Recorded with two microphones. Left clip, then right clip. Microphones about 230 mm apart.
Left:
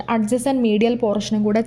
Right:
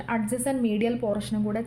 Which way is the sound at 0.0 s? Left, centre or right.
Left.